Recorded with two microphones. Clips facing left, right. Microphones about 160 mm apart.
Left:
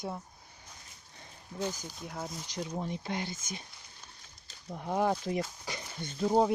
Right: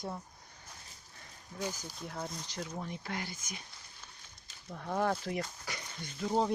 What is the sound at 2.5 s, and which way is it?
Speech, 15° left (ahead or behind).